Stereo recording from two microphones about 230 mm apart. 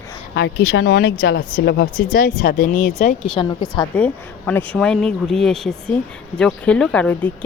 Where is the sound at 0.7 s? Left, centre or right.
Left.